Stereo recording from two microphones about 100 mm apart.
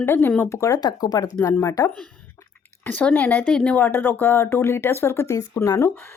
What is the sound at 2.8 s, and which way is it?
A woman's voice, 15° left (ahead or behind).